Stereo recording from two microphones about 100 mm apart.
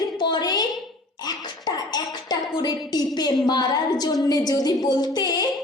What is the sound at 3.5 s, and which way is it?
Speech, 45° left (ahead or behind).